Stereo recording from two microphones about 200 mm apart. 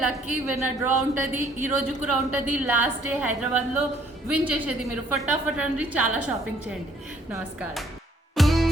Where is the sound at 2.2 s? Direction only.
10° right (ahead or behind).